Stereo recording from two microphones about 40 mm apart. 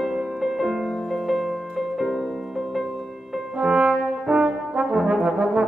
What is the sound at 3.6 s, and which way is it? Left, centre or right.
Brass instrument, right.